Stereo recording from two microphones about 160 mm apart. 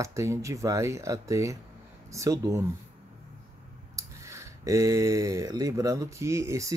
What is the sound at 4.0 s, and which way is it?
Speech, 20° right (ahead or behind).